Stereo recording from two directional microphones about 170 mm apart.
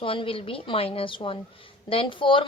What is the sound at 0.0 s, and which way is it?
A woman's voice, 30° left (ahead or behind).